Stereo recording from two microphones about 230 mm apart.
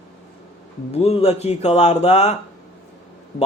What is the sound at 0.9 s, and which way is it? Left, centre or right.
Speech, left.